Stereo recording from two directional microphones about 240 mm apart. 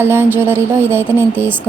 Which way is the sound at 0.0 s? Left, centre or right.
Centre.